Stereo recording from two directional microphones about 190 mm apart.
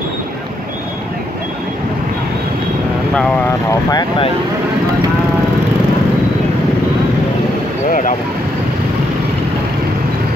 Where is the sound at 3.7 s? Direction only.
20° left (ahead or behind).